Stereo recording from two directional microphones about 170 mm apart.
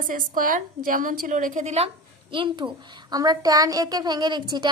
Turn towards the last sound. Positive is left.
turn(degrees=-25)  # may be behind; listen again after turning